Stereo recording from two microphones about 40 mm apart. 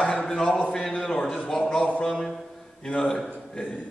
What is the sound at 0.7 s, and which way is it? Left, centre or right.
A man's voice, centre.